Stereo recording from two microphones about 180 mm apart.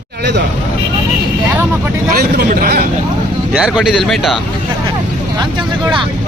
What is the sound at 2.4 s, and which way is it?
Speech, 50° right (ahead or behind).